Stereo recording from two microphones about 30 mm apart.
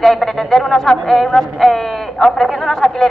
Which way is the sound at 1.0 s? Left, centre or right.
Centre.